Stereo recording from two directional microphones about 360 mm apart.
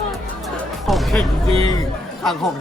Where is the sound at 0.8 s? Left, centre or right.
Centre.